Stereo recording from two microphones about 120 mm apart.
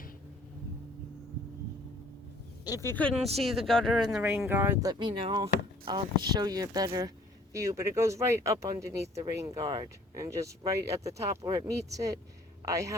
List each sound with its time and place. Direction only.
2.6 s speech: 30° left (ahead or behind)
2.9 s speech: 10° left (ahead or behind)
3.2 s speech: 60° right (ahead or behind)
3.7 s speech: 5° left (ahead or behind)
4.4 s speech: 15° right (ahead or behind)
4.8 s speech: 35° right (ahead or behind)